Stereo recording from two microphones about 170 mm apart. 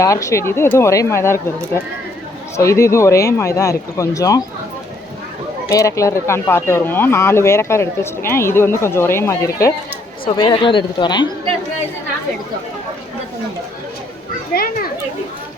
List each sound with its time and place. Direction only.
0.0 s speech: 20° left (ahead or behind)
5.6 s speech: 20° left (ahead or behind)
10.2 s speech: 30° left (ahead or behind)
14.5 s a child's voice: 60° left (ahead or behind)